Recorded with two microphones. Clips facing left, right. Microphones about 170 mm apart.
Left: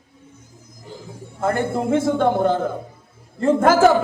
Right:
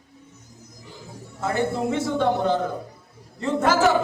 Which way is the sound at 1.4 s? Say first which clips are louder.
Left 3 dB; 50° left (ahead or behind).